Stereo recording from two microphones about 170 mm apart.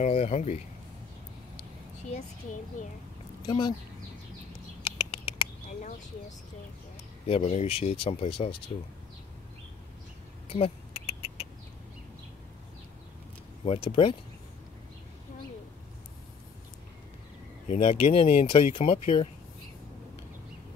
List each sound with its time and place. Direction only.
0.0 s speech: 40° left (ahead or behind)
3.4 s speech: 30° left (ahead or behind)
4.8 s rodents: 30° left (ahead or behind)
7.2 s speech: 35° left (ahead or behind)
10.5 s rodents: 35° left (ahead or behind)
13.7 s speech: 30° left (ahead or behind)
17.6 s speech: 45° left (ahead or behind)